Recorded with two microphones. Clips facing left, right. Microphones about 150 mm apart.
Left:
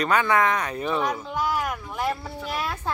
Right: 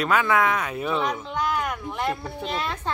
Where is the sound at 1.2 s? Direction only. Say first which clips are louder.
Even; 5° left (ahead or behind).